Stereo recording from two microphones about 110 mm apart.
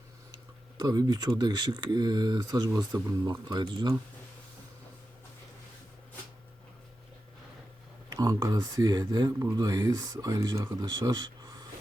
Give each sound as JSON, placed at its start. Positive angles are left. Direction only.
{"t": 0.8, "sound": "speech", "side_deg": -40}
{"t": 8.1, "sound": "a sound", "side_deg": -35}
{"t": 8.5, "sound": "speech", "side_deg": -35}